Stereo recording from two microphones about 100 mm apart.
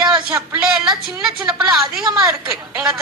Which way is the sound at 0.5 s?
10° right (ahead or behind).